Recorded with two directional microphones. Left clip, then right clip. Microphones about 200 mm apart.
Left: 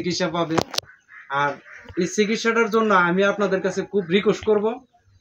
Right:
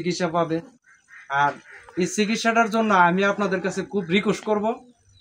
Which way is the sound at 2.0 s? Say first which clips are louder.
Left 2 dB; 25° right (ahead or behind).